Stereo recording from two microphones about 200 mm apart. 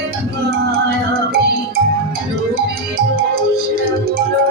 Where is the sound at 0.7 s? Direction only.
55° right (ahead or behind).